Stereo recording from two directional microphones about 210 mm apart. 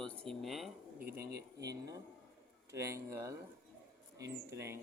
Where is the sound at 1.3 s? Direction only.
50° right (ahead or behind).